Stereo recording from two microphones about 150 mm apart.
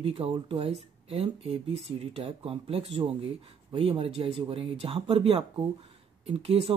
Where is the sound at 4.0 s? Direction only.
40° right (ahead or behind).